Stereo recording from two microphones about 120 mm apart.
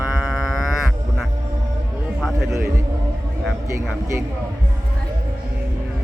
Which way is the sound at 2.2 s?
Centre (ahead or behind).